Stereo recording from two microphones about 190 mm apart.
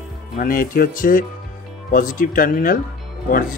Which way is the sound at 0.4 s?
50° left (ahead or behind).